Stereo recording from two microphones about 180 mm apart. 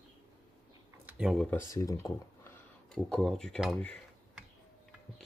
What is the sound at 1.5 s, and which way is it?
Speech, 15° left (ahead or behind).